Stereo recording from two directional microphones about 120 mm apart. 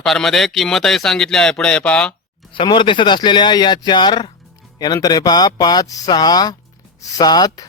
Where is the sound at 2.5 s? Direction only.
45° left (ahead or behind).